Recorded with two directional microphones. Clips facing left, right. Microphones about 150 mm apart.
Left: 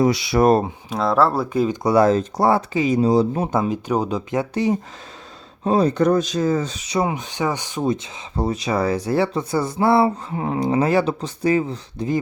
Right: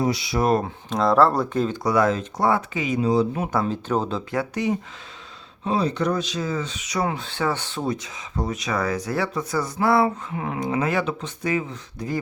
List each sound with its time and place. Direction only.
0.0 s speech: 85° left
0.9 s speech: 5° left (ahead or behind)
1.8 s speech: 30° left (ahead or behind)
3.5 s speech: 15° left (ahead or behind)
5.6 s speech: 45° left (ahead or behind); by 7.1 s 30° left (ahead or behind)
7.1 s speech: 15° left (ahead or behind); by 12.0 s 30° left (ahead or behind)